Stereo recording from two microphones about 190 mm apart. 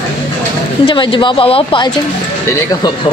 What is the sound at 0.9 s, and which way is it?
A woman's voice, 25° left (ahead or behind).